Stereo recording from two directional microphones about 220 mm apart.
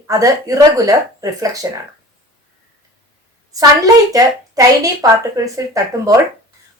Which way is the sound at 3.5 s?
15° right (ahead or behind).